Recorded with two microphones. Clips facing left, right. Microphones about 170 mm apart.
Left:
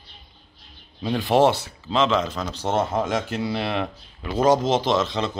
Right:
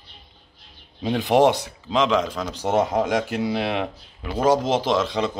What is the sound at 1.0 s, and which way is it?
Speech, 20° right (ahead or behind).